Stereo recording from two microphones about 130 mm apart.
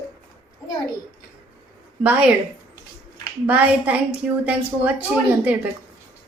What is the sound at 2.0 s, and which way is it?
Speech, 10° right (ahead or behind).